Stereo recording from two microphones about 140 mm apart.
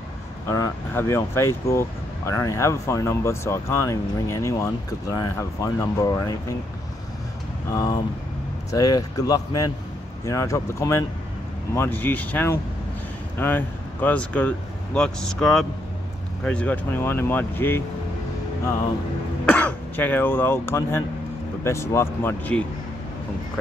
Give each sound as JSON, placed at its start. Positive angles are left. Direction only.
{"t": 0.5, "sound": "speech", "side_deg": 20}
{"t": 7.7, "sound": "speech", "side_deg": 25}
{"t": 19.4, "sound": "speech", "side_deg": 10}